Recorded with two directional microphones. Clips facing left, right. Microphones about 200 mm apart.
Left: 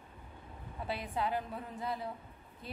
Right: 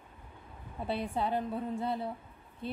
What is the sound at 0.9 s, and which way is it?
A woman's voice, 30° right (ahead or behind).